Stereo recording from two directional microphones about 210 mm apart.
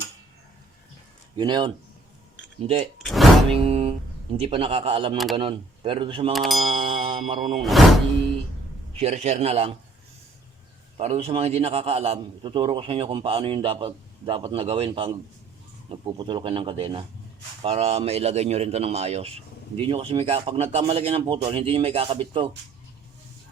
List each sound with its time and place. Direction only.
1.4 s a man's voice: 20° right (ahead or behind)
3.0 s music: centre (ahead or behind)
3.5 s a man's voice: 30° right (ahead or behind)
5.1 s speech: centre (ahead or behind)
5.4 s a man's voice: 25° right (ahead or behind)
6.3 s speech: centre (ahead or behind)
6.8 s a sound: 25° right (ahead or behind)
7.6 s speech: centre (ahead or behind)
9.0 s a man's voice: 30° right (ahead or behind)
10.9 s a man's voice: 30° right (ahead or behind)